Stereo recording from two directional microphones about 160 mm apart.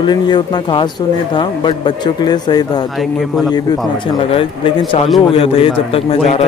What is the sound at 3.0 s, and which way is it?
Speech, centre (ahead or behind).